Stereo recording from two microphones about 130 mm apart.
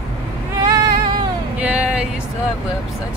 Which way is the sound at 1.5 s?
10° right (ahead or behind).